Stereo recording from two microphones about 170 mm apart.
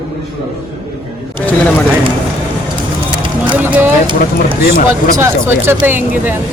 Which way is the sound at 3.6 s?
10° right (ahead or behind).